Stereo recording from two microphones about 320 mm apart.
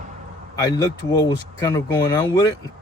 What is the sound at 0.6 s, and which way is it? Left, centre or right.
Speech, centre.